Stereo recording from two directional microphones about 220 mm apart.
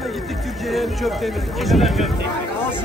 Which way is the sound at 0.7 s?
Centre (ahead or behind).